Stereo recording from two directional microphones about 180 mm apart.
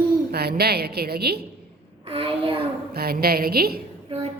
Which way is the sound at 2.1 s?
30° right (ahead or behind).